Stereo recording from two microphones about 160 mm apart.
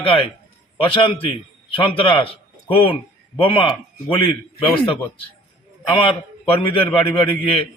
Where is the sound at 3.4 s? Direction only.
35° left (ahead or behind).